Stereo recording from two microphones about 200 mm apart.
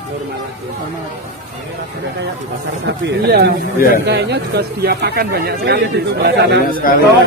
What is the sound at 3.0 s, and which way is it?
Speech, 55° right (ahead or behind).